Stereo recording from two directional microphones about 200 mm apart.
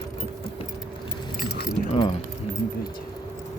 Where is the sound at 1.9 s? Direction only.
30° left (ahead or behind).